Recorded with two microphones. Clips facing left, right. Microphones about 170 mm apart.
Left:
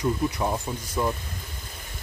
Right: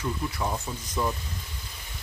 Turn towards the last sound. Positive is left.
turn(degrees=10)  # may be behind; listen again after turning